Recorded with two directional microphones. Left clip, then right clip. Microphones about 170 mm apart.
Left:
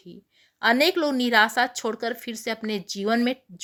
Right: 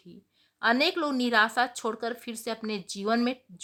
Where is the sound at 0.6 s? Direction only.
15° left (ahead or behind).